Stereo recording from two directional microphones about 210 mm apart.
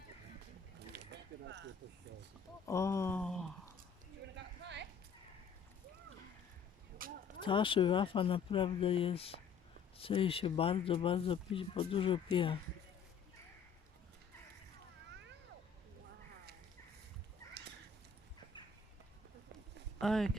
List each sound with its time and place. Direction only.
0.8 s a sound: 55° right (ahead or behind)
2.6 s a sound: 15° left (ahead or behind)
4.4 s clip-clop: 55° right (ahead or behind)
7.0 s speech: 45° right (ahead or behind)
7.3 s speech: 25° left (ahead or behind)
20.0 s speech: centre (ahead or behind)